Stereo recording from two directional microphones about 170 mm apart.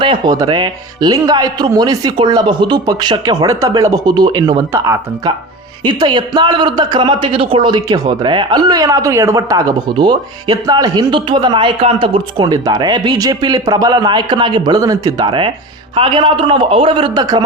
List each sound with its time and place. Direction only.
0.0 s a man's voice: 25° right (ahead or behind)
12.5 s a man's voice: 20° right (ahead or behind)